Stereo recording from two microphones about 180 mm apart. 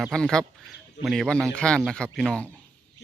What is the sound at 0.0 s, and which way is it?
Speech, 5° left (ahead or behind).